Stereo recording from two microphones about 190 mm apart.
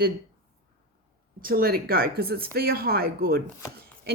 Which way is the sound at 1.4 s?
50° right (ahead or behind).